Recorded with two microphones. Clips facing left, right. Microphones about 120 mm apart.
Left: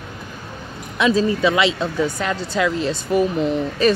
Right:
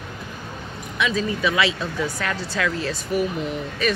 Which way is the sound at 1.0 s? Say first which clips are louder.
Left 6 dB; 35° left (ahead or behind).